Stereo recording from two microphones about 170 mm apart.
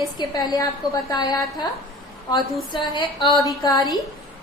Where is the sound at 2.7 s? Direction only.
30° left (ahead or behind).